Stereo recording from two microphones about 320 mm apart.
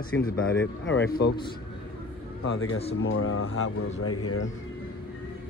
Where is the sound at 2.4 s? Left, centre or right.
Left.